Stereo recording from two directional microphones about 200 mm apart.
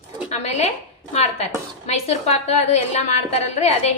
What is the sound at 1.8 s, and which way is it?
A woman's voice, 35° left (ahead or behind).